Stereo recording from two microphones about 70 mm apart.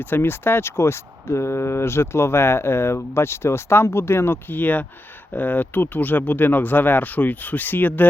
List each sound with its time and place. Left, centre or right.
0.0 s speech: left